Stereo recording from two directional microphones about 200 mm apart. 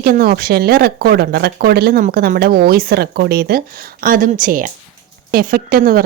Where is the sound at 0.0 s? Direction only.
50° right (ahead or behind).